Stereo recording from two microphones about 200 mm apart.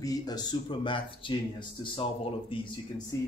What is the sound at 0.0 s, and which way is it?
Speech, 20° left (ahead or behind).